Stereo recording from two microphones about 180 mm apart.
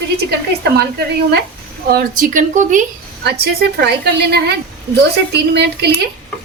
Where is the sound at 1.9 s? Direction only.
50° right (ahead or behind).